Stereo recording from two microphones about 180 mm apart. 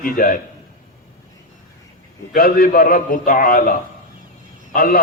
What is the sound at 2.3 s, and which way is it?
A man's voice, 55° left (ahead or behind).